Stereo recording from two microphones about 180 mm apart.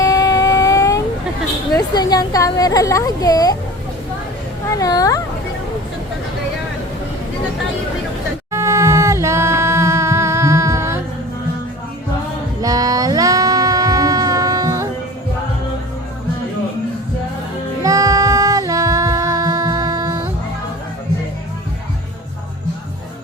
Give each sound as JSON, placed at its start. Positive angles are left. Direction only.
{"t": 0.0, "sound": "a sound", "side_deg": 20}
{"t": 1.7, "sound": "a woman's voice", "side_deg": 20}
{"t": 4.8, "sound": "a woman's voice", "side_deg": 20}
{"t": 8.5, "sound": "singing", "side_deg": -15}
{"t": 12.6, "sound": "music", "side_deg": -20}
{"t": 17.8, "sound": "singing", "side_deg": -20}